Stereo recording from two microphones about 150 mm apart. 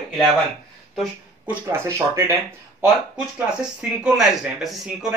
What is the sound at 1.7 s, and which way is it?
Speech, 20° right (ahead or behind).